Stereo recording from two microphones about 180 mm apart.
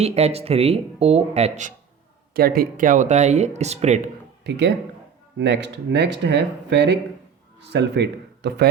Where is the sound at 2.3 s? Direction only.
55° right (ahead or behind); by 4.1 s 40° right (ahead or behind).